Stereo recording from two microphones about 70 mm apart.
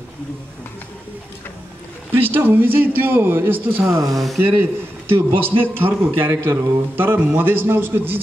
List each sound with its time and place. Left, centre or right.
2.1 s a man's voice: right
4.1 s speech: centre
4.4 s a man's voice: right